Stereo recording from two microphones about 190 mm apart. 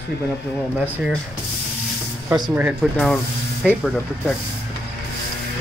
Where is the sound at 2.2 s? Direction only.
20° right (ahead or behind).